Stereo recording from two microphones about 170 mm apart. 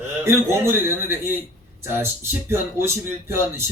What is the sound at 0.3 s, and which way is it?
Speech, 15° right (ahead or behind).